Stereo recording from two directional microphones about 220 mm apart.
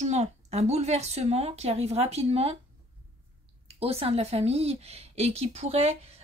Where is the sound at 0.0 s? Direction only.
30° right (ahead or behind).